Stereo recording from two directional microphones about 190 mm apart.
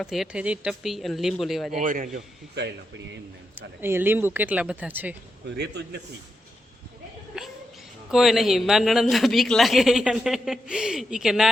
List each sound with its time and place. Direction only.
0.0 s a man's voice: centre (ahead or behind)
1.8 s a man's voice: 45° right (ahead or behind)
3.8 s speech: 10° right (ahead or behind)
7.3 s a sound: 5° right (ahead or behind)
8.1 s a man's voice: centre (ahead or behind)